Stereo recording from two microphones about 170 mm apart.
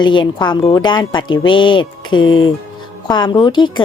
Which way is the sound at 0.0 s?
25° left (ahead or behind).